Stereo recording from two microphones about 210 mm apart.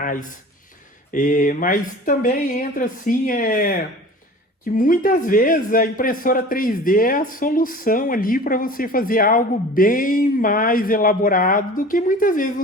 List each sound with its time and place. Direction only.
0.0 s speech: 40° left (ahead or behind)